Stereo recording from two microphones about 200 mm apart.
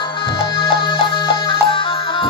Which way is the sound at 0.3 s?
25° left (ahead or behind).